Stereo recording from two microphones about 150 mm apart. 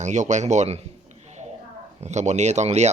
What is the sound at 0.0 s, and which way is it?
Speech, 55° right (ahead or behind).